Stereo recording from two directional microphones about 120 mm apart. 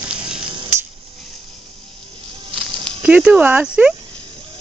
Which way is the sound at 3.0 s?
10° right (ahead or behind).